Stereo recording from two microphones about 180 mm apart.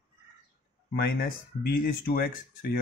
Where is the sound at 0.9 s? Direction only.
60° left (ahead or behind).